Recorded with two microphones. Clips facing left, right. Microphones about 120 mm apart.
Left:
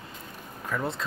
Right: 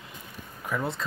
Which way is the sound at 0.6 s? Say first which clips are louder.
Even; 5° right (ahead or behind).